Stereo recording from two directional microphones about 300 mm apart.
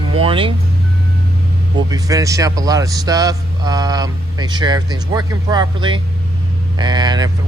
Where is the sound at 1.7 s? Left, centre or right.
Centre.